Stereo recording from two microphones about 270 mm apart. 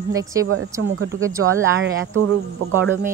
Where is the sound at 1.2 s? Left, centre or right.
Centre.